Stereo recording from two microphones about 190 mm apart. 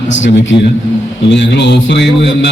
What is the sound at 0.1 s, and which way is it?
A man's voice, 70° left (ahead or behind).